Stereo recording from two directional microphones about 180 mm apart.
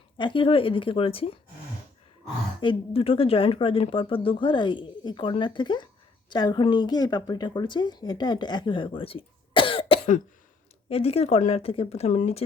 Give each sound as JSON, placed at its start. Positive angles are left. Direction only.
{"t": 0.2, "sound": "a woman's voice", "side_deg": 25}
{"t": 2.6, "sound": "a woman's voice", "side_deg": 30}